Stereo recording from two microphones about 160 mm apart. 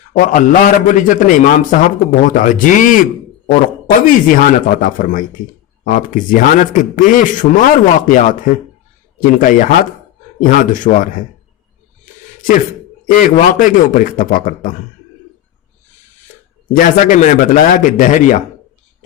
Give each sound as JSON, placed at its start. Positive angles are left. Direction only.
{"t": 0.1, "sound": "a man's voice", "side_deg": 55}
{"t": 13.1, "sound": "a man's voice", "side_deg": 55}
{"t": 16.7, "sound": "a man's voice", "side_deg": 55}